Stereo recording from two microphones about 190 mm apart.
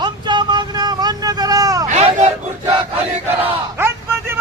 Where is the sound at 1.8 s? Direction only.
35° right (ahead or behind).